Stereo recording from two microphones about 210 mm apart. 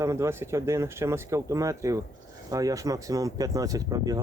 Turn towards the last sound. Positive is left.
turn(degrees=-15)  # may be behind; listen again after turning